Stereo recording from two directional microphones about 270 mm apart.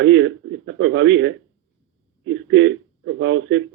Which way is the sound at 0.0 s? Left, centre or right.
Right.